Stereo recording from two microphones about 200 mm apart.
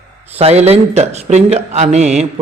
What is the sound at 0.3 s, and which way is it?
A man's voice, 30° right (ahead or behind).